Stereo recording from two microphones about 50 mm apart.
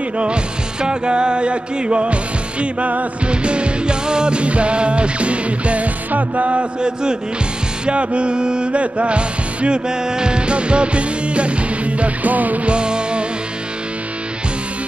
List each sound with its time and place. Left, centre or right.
0.2 s music: centre
12.7 s music: centre